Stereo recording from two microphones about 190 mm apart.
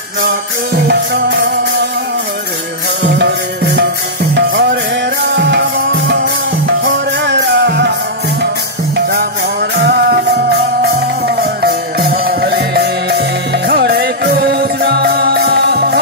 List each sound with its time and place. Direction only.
0.8 s music: 60° right (ahead or behind)
3.2 s music: 65° right (ahead or behind)
8.9 s music: 60° right (ahead or behind)